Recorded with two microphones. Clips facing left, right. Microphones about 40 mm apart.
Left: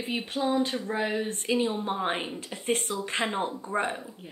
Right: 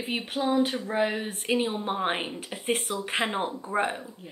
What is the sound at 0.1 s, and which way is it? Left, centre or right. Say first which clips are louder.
Speech: right 1 dB; centre.